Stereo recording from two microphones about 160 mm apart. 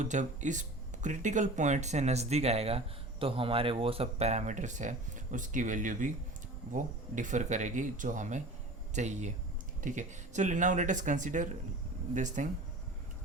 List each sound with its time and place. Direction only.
0.0 s speech: 50° right (ahead or behind)